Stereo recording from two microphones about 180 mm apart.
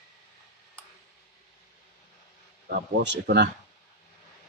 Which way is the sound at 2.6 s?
75° right (ahead or behind).